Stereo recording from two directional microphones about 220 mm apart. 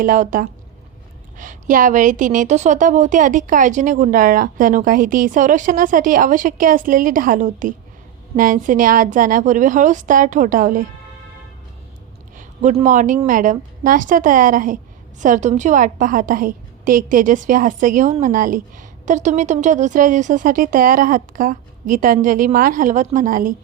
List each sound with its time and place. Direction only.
0.0 s a woman's voice: 35° right (ahead or behind)
12.4 s a woman's voice: 35° right (ahead or behind)